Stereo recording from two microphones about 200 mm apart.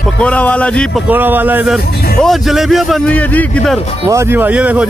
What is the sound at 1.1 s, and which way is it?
A man's voice, 10° right (ahead or behind).